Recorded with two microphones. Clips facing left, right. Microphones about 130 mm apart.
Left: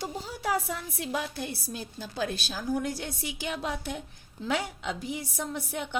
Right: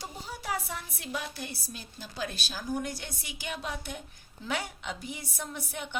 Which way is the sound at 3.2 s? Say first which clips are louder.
Left 4 dB; 90° left.